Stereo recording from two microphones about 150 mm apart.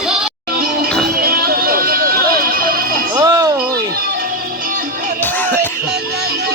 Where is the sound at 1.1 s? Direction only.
90° right.